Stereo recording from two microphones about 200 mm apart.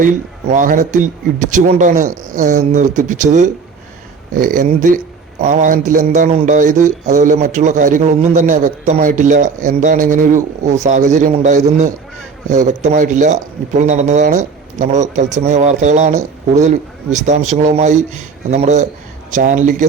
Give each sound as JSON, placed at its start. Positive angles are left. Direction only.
{"t": 0.5, "sound": "speech", "side_deg": -40}